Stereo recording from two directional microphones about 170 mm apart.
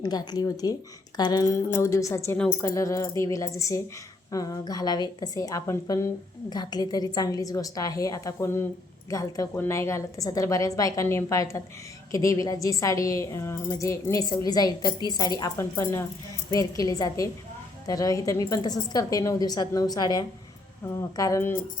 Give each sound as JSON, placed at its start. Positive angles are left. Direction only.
{"t": 0.0, "sound": "a woman's voice", "side_deg": 25}